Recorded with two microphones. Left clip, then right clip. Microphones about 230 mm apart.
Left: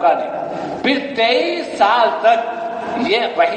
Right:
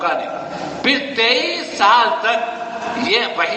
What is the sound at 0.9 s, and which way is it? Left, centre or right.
A man's voice, right.